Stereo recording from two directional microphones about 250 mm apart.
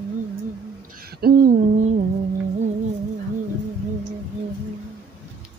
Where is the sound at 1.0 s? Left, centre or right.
Right.